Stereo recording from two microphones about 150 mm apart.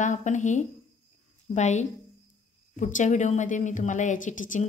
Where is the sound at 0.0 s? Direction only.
55° left (ahead or behind).